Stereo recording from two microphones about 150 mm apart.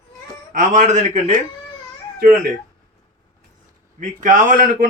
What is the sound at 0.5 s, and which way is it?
Speech, 55° right (ahead or behind).